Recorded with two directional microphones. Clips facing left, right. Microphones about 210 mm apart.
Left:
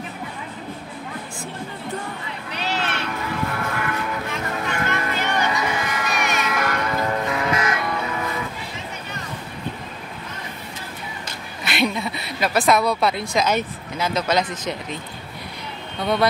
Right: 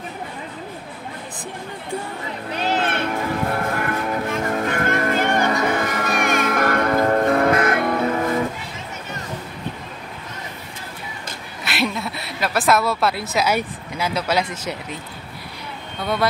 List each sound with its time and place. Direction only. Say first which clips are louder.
2.5 s music: right 5 dB; 50° right (ahead or behind)
11.6 s a woman's voice: left 1 dB; centre (ahead or behind)